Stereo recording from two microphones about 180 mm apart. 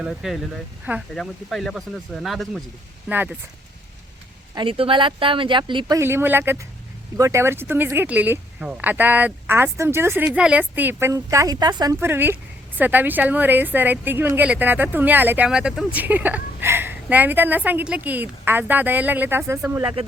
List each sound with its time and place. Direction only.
0.0 s speech: centre (ahead or behind)
4.5 s speech: 30° right (ahead or behind)
6.0 s speech: 15° right (ahead or behind)